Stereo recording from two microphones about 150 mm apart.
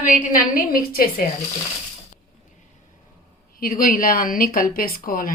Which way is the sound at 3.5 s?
75° left (ahead or behind).